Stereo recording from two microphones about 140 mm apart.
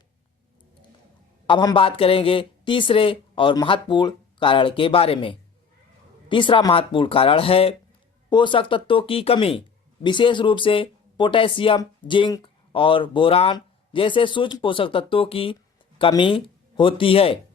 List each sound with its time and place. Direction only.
1.5 s speech: 35° left (ahead or behind)